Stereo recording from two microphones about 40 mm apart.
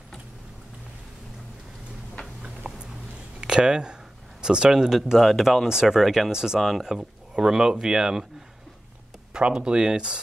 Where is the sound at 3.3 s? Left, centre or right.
Right.